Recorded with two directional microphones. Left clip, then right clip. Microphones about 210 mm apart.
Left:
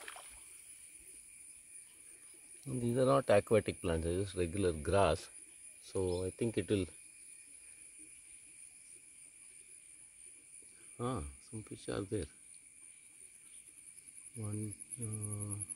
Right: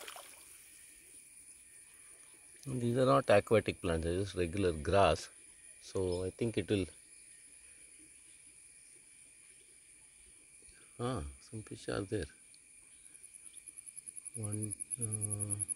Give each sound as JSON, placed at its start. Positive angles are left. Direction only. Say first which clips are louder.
{"t": 0.0, "sound": "splash", "louder": "right 1 dB", "side_deg": -45}
{"t": 2.6, "sound": "speech", "louder": "right 1 dB", "side_deg": 5}
{"t": 11.0, "sound": "speech", "louder": "right 1 dB", "side_deg": 10}